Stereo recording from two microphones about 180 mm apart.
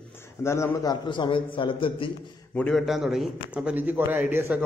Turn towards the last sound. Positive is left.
turn(degrees=-10)  # may be behind; listen again after turning